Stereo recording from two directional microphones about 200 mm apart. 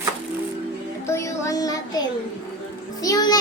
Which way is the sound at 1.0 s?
15° left (ahead or behind).